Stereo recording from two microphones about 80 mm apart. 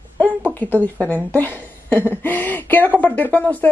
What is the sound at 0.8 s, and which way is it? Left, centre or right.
Speech, right.